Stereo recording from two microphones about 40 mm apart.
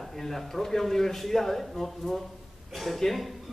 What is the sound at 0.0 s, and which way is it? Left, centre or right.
A man's voice, centre.